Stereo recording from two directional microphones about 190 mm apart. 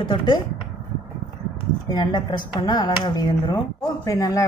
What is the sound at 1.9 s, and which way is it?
Speech, 25° left (ahead or behind).